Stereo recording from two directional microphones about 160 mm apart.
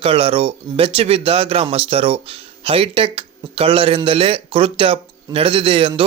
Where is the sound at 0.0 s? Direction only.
35° right (ahead or behind).